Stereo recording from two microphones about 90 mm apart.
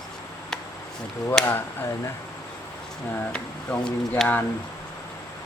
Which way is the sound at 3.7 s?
10° left (ahead or behind).